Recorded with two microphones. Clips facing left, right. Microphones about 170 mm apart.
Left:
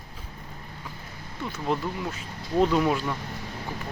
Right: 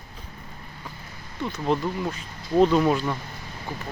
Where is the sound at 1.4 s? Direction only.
5° left (ahead or behind).